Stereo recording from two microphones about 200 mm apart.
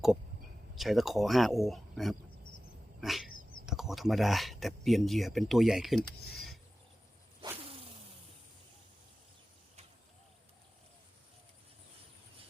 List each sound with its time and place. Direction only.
0.8 s speech: centre (ahead or behind)
3.0 s cat: centre (ahead or behind)
3.7 s speech: centre (ahead or behind)
7.4 s whoosh: 25° right (ahead or behind)